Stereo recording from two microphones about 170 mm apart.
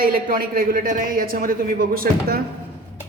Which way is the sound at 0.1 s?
55° right (ahead or behind).